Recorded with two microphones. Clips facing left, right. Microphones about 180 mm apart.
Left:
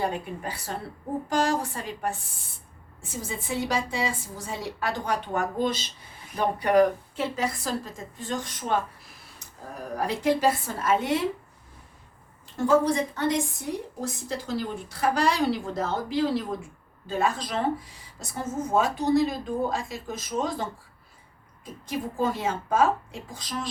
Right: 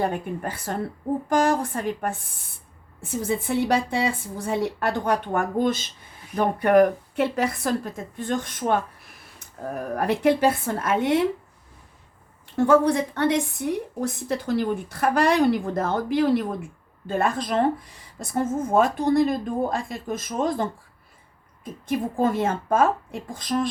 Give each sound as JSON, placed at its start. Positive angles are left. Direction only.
{"t": 0.0, "sound": "a woman's voice", "side_deg": -50}
{"t": 12.5, "sound": "a woman's voice", "side_deg": -60}